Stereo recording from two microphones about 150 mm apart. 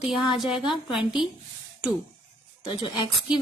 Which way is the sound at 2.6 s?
30° left (ahead or behind).